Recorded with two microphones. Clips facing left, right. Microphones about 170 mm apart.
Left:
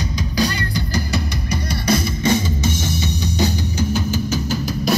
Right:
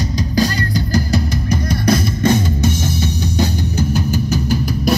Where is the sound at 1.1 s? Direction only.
50° right (ahead or behind).